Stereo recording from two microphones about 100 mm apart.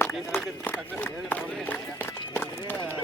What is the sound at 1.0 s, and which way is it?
Clip-clop, 15° left (ahead or behind).